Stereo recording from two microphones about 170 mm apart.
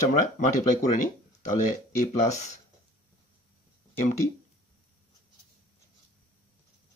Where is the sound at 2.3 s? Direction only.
40° left (ahead or behind).